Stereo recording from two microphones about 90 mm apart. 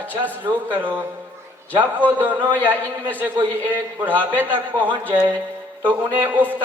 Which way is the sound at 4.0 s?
20° right (ahead or behind).